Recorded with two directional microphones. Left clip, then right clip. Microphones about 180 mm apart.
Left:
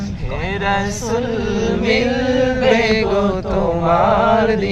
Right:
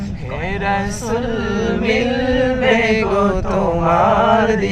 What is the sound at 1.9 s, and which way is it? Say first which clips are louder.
Chant: even; 10° right (ahead or behind).